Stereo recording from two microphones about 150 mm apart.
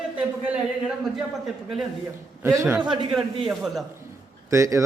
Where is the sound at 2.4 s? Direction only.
20° right (ahead or behind).